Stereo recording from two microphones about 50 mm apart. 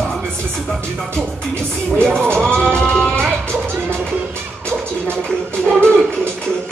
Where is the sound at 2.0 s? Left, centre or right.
Centre.